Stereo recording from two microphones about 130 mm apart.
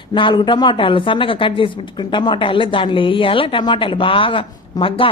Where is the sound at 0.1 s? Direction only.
35° left (ahead or behind).